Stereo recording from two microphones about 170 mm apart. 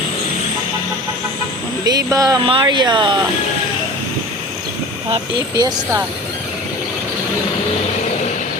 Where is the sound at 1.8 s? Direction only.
20° right (ahead or behind).